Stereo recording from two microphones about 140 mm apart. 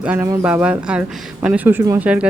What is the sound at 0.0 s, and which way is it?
Speech, 10° right (ahead or behind).